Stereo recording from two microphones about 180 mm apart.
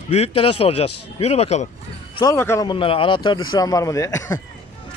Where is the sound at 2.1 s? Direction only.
20° left (ahead or behind).